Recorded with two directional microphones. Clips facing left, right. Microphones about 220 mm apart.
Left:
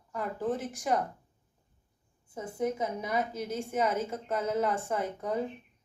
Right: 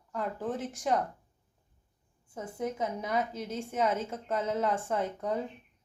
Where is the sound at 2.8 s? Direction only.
5° left (ahead or behind).